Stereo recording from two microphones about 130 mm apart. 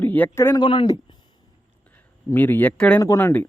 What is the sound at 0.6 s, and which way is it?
Speech, 40° left (ahead or behind).